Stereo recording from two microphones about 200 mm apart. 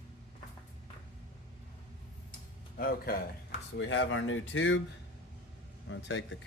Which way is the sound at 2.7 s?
45° left (ahead or behind).